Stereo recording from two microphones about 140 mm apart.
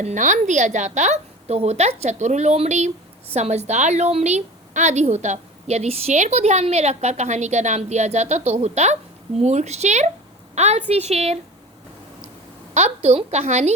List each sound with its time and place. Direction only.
0.0 s a woman's voice: 60° right (ahead or behind)
12.7 s a woman's voice: 50° right (ahead or behind)